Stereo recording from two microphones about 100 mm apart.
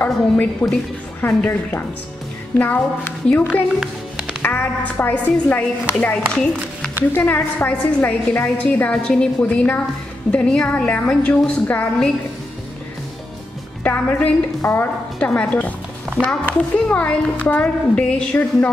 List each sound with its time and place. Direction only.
0.0 s a woman's voice: 15° left (ahead or behind)
13.8 s a woman's voice: 15° left (ahead or behind)
15.1 s a woman's voice: 10° left (ahead or behind)